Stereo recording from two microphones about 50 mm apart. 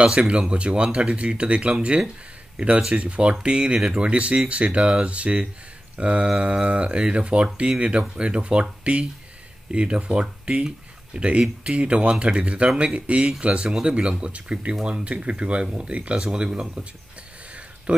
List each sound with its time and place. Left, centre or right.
0.0 s speech: centre
17.9 s speech: right